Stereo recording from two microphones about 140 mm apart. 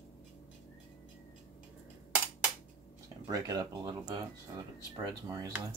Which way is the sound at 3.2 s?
25° right (ahead or behind).